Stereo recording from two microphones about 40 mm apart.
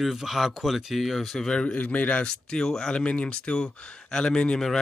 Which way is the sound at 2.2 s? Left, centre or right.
Centre.